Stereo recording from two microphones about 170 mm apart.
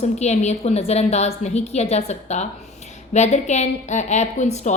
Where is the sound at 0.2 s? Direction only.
40° left (ahead or behind).